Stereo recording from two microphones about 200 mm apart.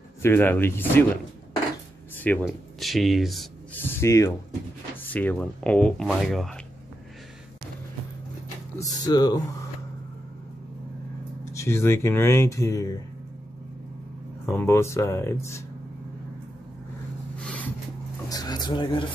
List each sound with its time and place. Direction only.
0.2 s speech: 10° left (ahead or behind)
2.1 s speech: 10° left (ahead or behind)
3.8 s speech: 15° left (ahead or behind)
8.7 s speech: 20° left (ahead or behind)
11.5 s speech: 15° left (ahead or behind)
14.5 s speech: 10° left (ahead or behind)
17.4 s a sound: 5° left (ahead or behind)
18.3 s a sound: 20° left (ahead or behind)